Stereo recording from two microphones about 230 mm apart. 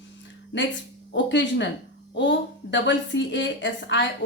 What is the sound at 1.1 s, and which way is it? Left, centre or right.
A woman's voice, left.